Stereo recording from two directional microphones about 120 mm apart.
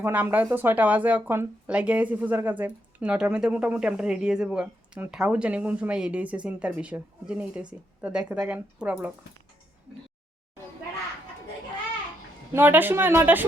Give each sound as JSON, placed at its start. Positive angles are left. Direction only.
{"t": 0.0, "sound": "speech", "side_deg": -15}
{"t": 12.5, "sound": "speech", "side_deg": -15}